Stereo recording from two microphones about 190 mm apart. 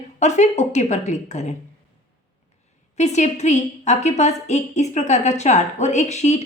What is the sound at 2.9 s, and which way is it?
A woman's voice, 35° left (ahead or behind).